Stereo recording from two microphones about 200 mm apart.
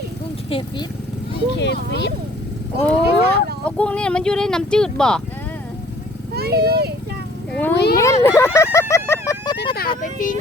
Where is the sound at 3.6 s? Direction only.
5° left (ahead or behind).